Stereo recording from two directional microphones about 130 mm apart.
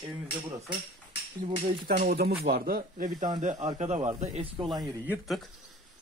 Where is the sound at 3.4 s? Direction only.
65° right (ahead or behind).